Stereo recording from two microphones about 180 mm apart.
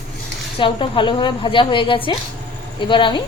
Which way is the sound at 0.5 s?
25° left (ahead or behind).